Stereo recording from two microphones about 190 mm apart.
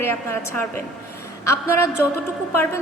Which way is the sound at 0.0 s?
10° left (ahead or behind).